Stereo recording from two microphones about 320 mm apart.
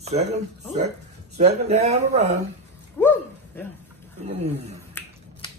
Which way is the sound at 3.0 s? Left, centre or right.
Centre.